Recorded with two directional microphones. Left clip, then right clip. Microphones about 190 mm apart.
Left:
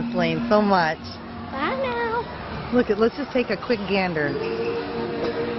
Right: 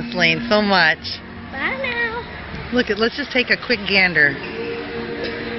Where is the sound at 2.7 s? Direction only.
5° right (ahead or behind).